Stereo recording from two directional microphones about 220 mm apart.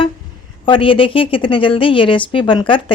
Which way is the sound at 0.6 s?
25° left (ahead or behind).